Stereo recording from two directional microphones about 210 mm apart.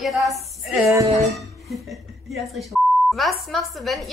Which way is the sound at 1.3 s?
Centre (ahead or behind).